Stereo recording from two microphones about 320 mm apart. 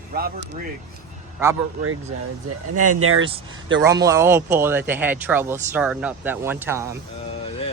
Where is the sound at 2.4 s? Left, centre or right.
Right.